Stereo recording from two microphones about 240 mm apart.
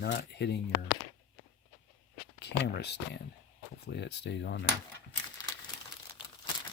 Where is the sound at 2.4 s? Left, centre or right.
Left.